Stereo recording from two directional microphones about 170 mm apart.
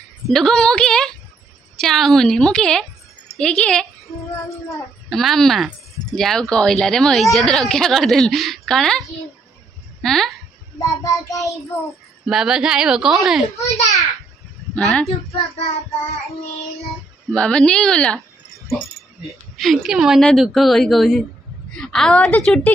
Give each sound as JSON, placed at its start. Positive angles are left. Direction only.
{"t": 0.3, "sound": "a woman's voice", "side_deg": 5}
{"t": 5.1, "sound": "a woman's voice", "side_deg": 0}
{"t": 11.2, "sound": "child singing", "side_deg": 20}
{"t": 12.3, "sound": "a woman's voice", "side_deg": -5}
{"t": 13.6, "sound": "a child's voice", "side_deg": 40}
{"t": 15.0, "sound": "a child's voice", "side_deg": 35}
{"t": 17.3, "sound": "a woman's voice", "side_deg": 5}
{"t": 19.2, "sound": "a woman's voice", "side_deg": 0}